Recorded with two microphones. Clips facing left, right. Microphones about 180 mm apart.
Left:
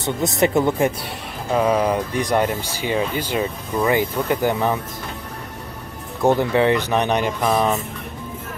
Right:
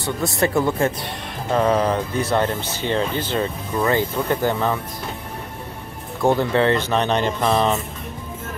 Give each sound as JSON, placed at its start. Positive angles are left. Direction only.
{"t": 0.0, "sound": "speech", "side_deg": 20}
{"t": 6.2, "sound": "speech", "side_deg": 15}